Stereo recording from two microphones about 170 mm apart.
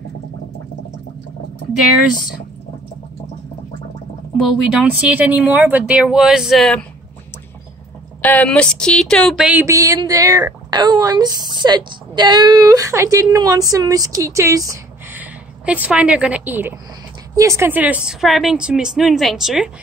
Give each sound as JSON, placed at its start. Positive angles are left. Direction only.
{"t": 4.4, "sound": "speech", "side_deg": -5}
{"t": 8.2, "sound": "speech", "side_deg": 10}
{"t": 9.5, "sound": "a woman's voice", "side_deg": -15}
{"t": 15.6, "sound": "a woman's voice", "side_deg": -10}